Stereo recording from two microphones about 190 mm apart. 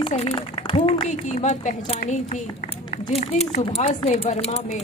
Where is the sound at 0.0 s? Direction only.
30° left (ahead or behind).